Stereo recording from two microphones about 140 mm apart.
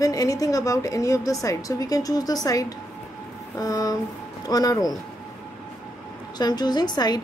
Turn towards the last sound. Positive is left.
turn(degrees=30)  # may be behind; listen again after turning